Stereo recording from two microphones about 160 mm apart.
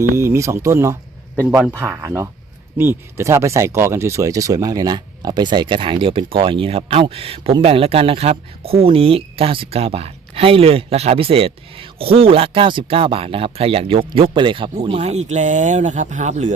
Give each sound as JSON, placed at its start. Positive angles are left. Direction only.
{"t": 0.2, "sound": "speech", "side_deg": -15}
{"t": 1.5, "sound": "a man's voice", "side_deg": -5}
{"t": 2.0, "sound": "speech", "side_deg": -15}
{"t": 14.9, "sound": "speech", "side_deg": -45}